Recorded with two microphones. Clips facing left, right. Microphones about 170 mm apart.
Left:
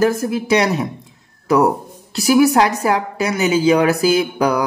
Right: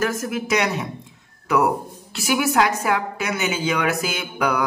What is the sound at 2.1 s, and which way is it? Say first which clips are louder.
A woman's voice: left 7 dB; 35° left (ahead or behind).